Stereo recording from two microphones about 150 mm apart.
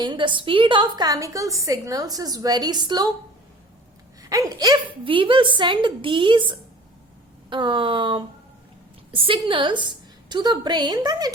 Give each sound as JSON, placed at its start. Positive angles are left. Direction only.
{"t": 0.0, "sound": "a woman's voice", "side_deg": -30}
{"t": 4.2, "sound": "a woman's voice", "side_deg": -25}